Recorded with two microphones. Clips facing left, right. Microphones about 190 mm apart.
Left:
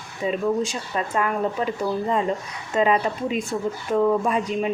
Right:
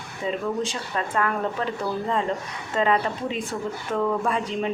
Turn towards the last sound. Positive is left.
turn(degrees=15)  # may be behind; listen again after turning